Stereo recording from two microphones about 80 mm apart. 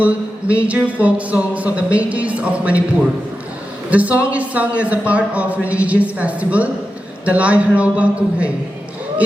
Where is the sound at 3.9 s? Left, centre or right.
Centre.